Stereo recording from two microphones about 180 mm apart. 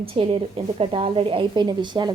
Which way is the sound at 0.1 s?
30° right (ahead or behind).